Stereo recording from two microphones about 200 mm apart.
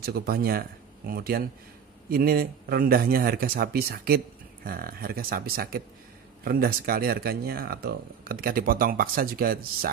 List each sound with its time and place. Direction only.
0.0 s speech: 50° right (ahead or behind)